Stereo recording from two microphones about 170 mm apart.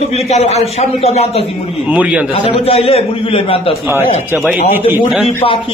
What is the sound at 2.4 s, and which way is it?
A man's voice, 35° left (ahead or behind).